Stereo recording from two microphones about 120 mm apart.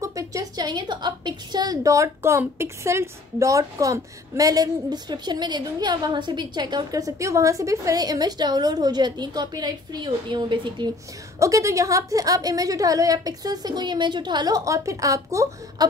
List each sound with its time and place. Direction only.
0.0 s a woman's voice: 30° right (ahead or behind)
11.3 s a woman's voice: 25° right (ahead or behind)